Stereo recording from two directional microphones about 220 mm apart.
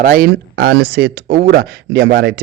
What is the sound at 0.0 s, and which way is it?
A man's voice, 40° right (ahead or behind).